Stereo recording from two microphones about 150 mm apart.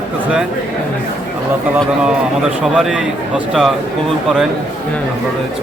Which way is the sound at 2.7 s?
5° right (ahead or behind).